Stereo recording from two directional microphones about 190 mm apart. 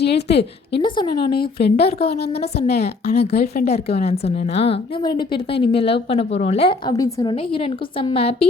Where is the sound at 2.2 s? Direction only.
35° left (ahead or behind).